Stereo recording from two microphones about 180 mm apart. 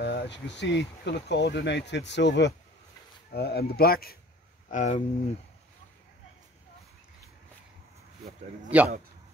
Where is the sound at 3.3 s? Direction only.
60° left (ahead or behind).